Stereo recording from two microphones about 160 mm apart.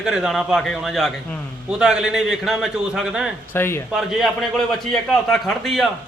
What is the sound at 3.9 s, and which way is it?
A man's voice, centre (ahead or behind).